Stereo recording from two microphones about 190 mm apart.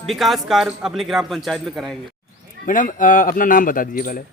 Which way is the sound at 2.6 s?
45° left (ahead or behind).